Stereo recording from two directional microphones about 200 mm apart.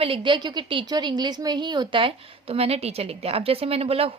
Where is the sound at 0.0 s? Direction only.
25° right (ahead or behind).